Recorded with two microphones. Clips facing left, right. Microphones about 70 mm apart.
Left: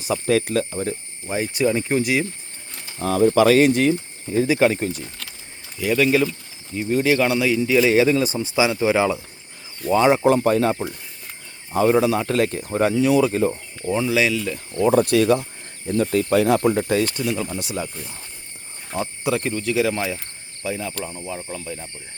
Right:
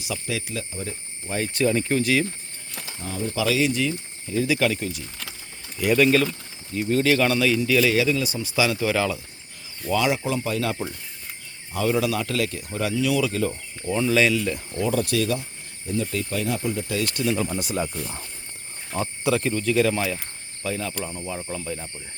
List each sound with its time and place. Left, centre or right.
0.0 s speech: left
1.3 s speech: centre
3.0 s speech: left
3.4 s speech: left
5.8 s speech: centre
6.7 s speech: centre
9.9 s speech: left
10.2 s speech: left; by 14.8 s centre
14.8 s speech: left
17.0 s speech: left
17.3 s speech: centre
19.4 s speech: centre